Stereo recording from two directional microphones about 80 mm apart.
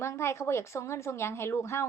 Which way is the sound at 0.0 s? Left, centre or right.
Left.